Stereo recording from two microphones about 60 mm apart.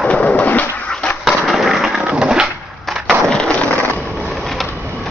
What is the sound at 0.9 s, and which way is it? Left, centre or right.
Skateboard, centre.